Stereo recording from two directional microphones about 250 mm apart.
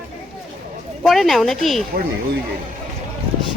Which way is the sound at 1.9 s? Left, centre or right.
Right.